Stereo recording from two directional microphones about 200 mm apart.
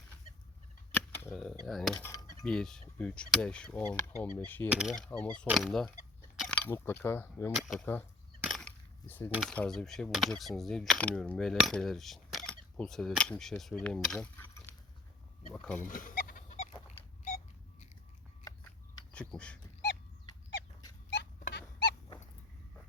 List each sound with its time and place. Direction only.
0.9 s cap gun: 10° left (ahead or behind)
1.6 s speech: centre (ahead or behind)
4.7 s speech: 5° right (ahead or behind)
6.4 s a sound: 5° left (ahead or behind)
7.0 s speech: 15° left (ahead or behind)
8.4 s coin: centre (ahead or behind)
9.3 s speech: centre (ahead or behind)
15.8 s chicken: 40° left (ahead or behind)
16.9 s a sound: 35° left (ahead or behind)
19.1 s a sound: 5° left (ahead or behind)
21.5 s dog: 55° left (ahead or behind)